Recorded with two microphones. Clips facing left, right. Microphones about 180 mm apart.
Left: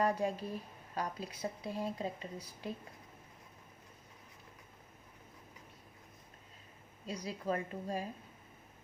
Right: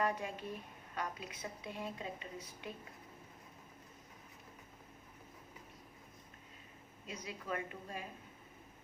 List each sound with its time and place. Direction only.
0.0 s speech: 35° left (ahead or behind)
7.1 s speech: 35° left (ahead or behind)